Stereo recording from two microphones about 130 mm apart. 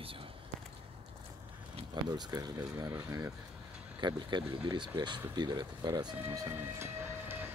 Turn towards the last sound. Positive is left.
turn(degrees=-20)  # may be behind; listen again after turning